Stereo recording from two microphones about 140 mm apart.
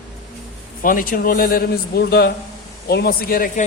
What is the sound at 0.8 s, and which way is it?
A man's voice, 80° left.